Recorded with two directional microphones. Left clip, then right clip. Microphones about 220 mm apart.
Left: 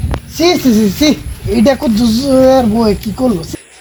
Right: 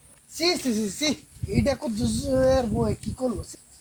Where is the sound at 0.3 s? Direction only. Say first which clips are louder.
Left 14 dB; 5° right (ahead or behind).